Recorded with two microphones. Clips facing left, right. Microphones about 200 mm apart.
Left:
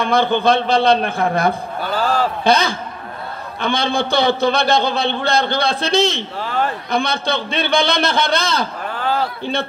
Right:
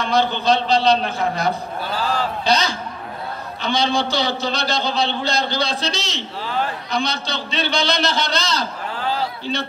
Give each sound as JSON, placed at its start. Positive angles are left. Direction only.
{"t": 0.0, "sound": "a man's voice", "side_deg": 55}